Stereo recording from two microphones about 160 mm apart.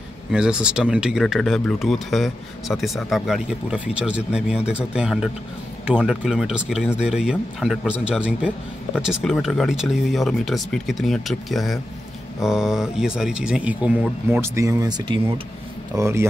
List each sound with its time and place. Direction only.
0.3 s speech: 5° right (ahead or behind)
14.3 s speech: 15° right (ahead or behind)